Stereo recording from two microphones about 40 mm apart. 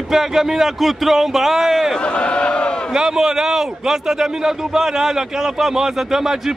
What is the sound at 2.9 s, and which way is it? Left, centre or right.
A man's voice, centre.